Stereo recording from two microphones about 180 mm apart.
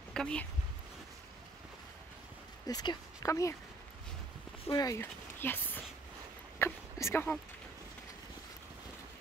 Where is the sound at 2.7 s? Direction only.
20° left (ahead or behind).